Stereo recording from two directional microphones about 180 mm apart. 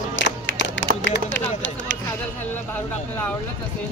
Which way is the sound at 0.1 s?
90° left.